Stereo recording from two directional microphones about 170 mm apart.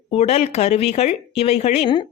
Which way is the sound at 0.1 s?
40° left (ahead or behind).